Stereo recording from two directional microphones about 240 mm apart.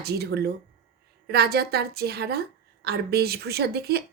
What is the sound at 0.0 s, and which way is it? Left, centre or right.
Speech, right.